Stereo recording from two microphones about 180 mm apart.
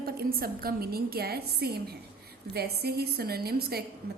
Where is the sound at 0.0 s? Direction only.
55° right (ahead or behind).